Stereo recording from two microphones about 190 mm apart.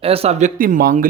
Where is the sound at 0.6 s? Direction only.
45° right (ahead or behind).